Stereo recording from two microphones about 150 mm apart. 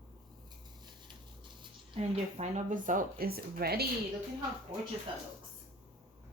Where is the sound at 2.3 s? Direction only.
55° right (ahead or behind); by 3.9 s 90° right.